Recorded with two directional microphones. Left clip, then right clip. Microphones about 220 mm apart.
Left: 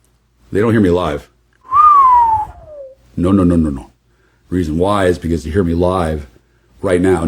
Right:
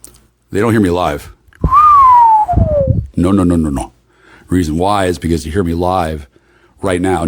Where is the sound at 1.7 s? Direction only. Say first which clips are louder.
Right 2 dB; 55° right (ahead or behind).